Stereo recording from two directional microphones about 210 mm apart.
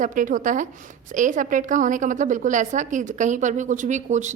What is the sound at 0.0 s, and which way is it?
A woman's voice, 40° right (ahead or behind).